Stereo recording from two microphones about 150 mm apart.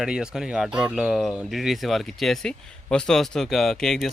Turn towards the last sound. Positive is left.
turn(degrees=5)  # may be behind; listen again after turning